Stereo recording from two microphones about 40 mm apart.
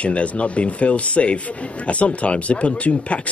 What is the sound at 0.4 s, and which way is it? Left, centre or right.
Speech, left.